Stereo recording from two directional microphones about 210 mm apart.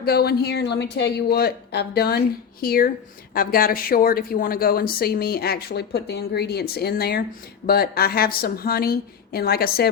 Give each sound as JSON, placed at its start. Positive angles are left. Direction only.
{"t": 0.0, "sound": "speech", "side_deg": 50}